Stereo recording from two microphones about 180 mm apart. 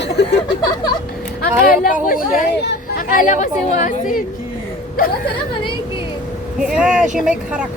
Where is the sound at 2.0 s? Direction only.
50° left (ahead or behind).